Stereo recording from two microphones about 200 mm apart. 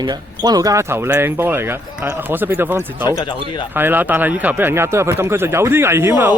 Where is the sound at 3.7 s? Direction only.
10° right (ahead or behind).